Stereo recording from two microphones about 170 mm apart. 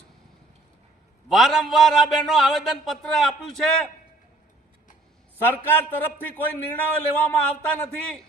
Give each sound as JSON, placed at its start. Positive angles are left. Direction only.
{"t": 1.3, "sound": "a man's voice", "side_deg": 0}
{"t": 5.4, "sound": "a man's voice", "side_deg": 10}